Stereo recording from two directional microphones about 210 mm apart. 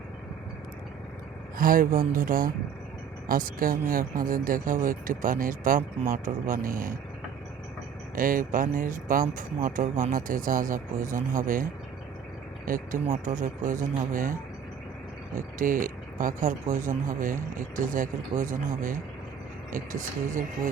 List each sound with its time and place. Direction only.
1.5 s speech: 40° right (ahead or behind)
8.1 s speech: 40° right (ahead or behind)
15.4 s speech: 40° right (ahead or behind)